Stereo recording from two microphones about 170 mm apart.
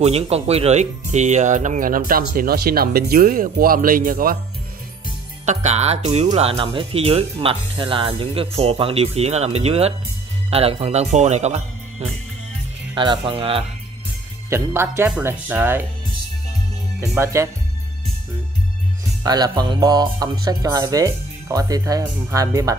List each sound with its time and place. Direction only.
0.0 s speech: 35° right (ahead or behind); by 4.4 s 55° right (ahead or behind)
5.4 s speech: 45° right (ahead or behind)
12.9 s speech: 30° right (ahead or behind)
14.5 s speech: 15° right (ahead or behind)
17.2 s speech: 15° right (ahead or behind)
19.2 s speech: 25° right (ahead or behind)